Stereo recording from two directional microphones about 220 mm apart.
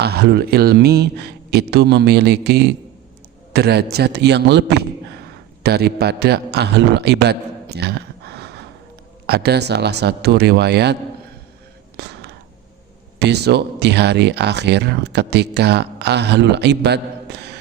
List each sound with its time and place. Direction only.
0.0 s a man's voice: 45° right (ahead or behind)
11.9 s a sound: 50° right (ahead or behind)
13.1 s speech: 50° right (ahead or behind)